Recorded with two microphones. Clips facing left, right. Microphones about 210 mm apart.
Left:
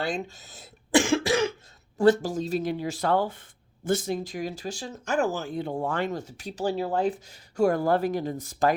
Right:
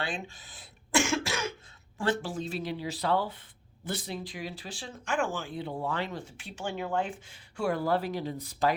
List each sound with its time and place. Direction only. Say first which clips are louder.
0.0 s speech: left 6 dB; 40° left (ahead or behind)